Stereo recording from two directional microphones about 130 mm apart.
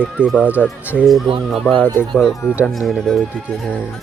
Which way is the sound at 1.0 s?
5° right (ahead or behind).